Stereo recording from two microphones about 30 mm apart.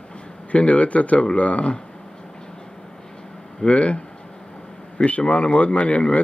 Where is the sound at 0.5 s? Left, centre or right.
Left.